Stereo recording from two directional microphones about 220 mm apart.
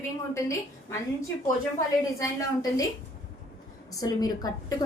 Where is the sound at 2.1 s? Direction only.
15° left (ahead or behind).